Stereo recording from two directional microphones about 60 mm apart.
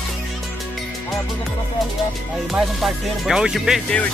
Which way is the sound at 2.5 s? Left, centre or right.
Centre.